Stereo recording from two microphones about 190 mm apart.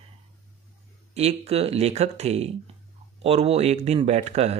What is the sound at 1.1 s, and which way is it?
Speech, 35° right (ahead or behind).